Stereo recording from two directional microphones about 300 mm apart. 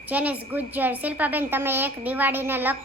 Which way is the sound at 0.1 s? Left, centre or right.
Centre.